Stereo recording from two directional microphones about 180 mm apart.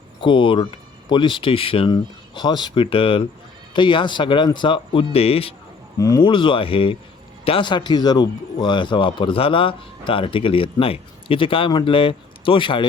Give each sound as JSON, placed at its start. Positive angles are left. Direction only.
{"t": 0.2, "sound": "speech", "side_deg": 30}
{"t": 6.0, "sound": "speech", "side_deg": 20}